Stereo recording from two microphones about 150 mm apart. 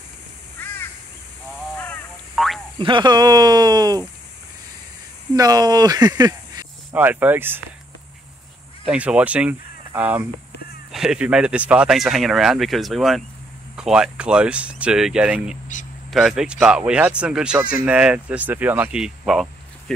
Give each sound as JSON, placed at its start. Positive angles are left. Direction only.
{"t": 2.3, "sound": "frog", "side_deg": 0}
{"t": 2.8, "sound": "a sound", "side_deg": -30}
{"t": 5.3, "sound": "speech", "side_deg": -25}
{"t": 6.9, "sound": "speech", "side_deg": -10}
{"t": 8.8, "sound": "speech", "side_deg": -10}